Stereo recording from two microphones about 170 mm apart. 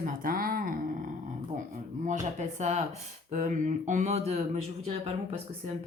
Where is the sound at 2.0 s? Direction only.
45° right (ahead or behind).